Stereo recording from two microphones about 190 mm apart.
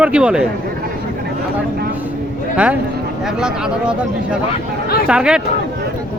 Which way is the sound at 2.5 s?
5° right (ahead or behind).